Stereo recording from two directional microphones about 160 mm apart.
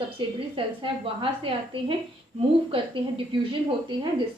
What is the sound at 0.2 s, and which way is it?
A woman's voice, 30° right (ahead or behind).